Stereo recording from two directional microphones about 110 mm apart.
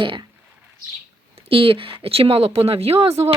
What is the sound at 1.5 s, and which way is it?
Speech, 55° right (ahead or behind).